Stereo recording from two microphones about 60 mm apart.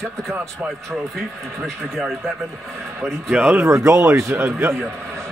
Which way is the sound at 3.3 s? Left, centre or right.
Right.